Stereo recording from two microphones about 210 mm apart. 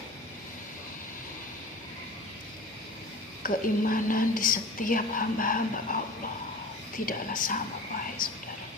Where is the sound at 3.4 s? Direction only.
40° left (ahead or behind).